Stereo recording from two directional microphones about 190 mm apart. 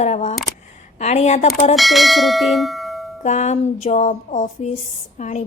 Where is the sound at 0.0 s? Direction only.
40° left (ahead or behind).